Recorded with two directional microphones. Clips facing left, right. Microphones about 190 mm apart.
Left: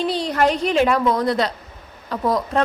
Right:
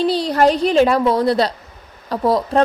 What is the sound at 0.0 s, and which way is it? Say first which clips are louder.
Speech: right 4 dB; 35° right (ahead or behind).